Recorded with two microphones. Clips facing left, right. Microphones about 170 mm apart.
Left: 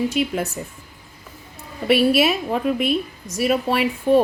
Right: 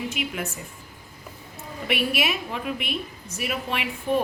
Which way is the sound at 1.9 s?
35° left (ahead or behind).